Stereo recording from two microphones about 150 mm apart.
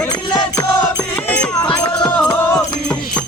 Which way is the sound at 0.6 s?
10° left (ahead or behind).